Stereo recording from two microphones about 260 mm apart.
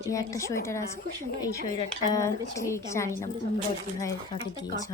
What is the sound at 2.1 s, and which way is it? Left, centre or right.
A woman's voice, centre.